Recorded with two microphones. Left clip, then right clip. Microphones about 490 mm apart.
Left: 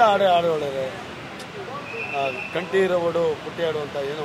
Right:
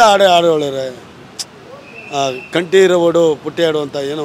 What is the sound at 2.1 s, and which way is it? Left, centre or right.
Speech, right.